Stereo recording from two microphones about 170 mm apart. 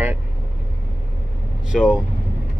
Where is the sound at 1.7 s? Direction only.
5° right (ahead or behind).